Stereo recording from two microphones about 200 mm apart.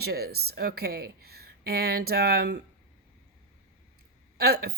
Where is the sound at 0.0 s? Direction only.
50° right (ahead or behind).